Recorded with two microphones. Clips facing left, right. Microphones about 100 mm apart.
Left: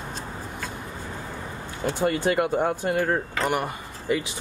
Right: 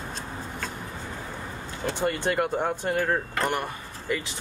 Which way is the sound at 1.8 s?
5° left (ahead or behind).